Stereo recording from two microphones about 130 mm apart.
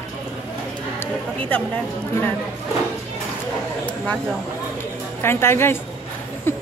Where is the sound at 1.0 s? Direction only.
15° left (ahead or behind).